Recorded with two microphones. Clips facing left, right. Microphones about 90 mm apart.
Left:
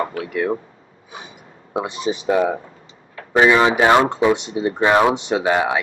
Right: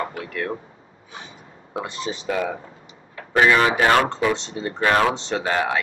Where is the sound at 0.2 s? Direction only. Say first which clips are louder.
Left 6 dB; 15° left (ahead or behind).